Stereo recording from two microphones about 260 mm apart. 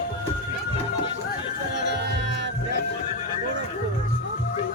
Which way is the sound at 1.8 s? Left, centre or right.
Right.